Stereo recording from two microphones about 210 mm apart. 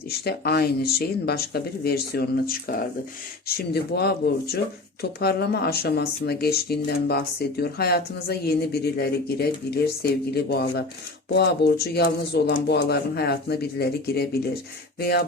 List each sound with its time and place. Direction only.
0.3 s speech: 50° left (ahead or behind)